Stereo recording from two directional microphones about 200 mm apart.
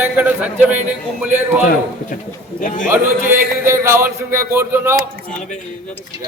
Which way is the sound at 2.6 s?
40° left (ahead or behind).